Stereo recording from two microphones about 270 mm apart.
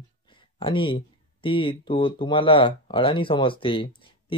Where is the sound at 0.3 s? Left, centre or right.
Centre.